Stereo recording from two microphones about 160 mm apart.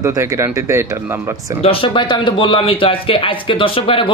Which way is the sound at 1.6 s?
35° left (ahead or behind).